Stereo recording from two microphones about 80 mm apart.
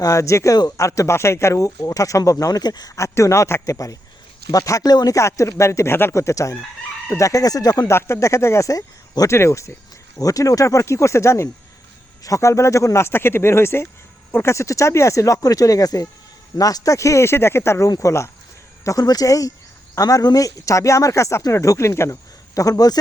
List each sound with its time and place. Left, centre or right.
0.0 s speech: left
5.1 s speech: left
7.9 s speech: left
18.9 s speech: left